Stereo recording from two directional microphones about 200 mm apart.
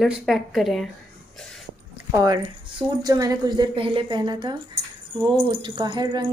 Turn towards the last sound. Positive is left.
turn(degrees=-20)  # may be behind; listen again after turning